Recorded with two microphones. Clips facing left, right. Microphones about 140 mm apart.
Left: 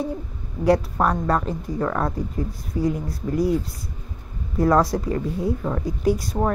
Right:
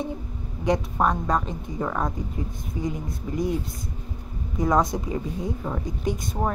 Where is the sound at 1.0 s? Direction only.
5° right (ahead or behind).